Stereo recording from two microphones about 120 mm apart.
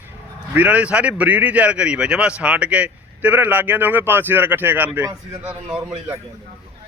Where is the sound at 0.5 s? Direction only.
10° right (ahead or behind).